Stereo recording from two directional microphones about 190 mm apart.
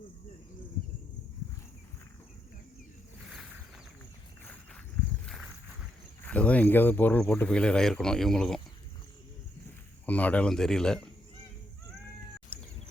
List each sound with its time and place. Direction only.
3.2 s a sound: centre (ahead or behind)
5.2 s walk: centre (ahead or behind)
6.2 s speech: 5° left (ahead or behind)
10.1 s speech: 5° left (ahead or behind)